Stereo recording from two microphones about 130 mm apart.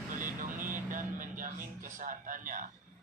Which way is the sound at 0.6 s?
90° right.